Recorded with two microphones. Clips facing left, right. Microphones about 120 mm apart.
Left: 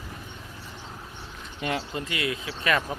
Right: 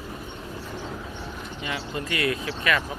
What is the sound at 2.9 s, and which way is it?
Speech, 40° left (ahead or behind).